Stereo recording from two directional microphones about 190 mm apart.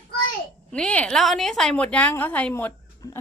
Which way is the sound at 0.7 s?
5° left (ahead or behind).